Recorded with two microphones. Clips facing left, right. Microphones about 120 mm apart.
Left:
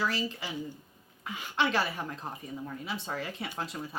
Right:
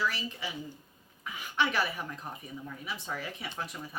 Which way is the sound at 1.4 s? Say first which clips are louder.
Left 1 dB; 30° left (ahead or behind).